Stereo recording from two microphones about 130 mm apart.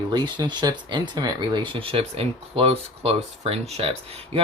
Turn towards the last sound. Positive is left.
turn(degrees=-45)  # may be behind; listen again after turning